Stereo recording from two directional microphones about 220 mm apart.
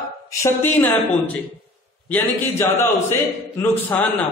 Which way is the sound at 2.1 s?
10° left (ahead or behind).